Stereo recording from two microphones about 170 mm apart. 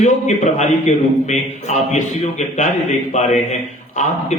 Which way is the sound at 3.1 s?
45° left (ahead or behind).